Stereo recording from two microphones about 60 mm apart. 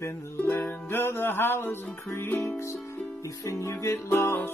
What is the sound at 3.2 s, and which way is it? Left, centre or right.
Music, left.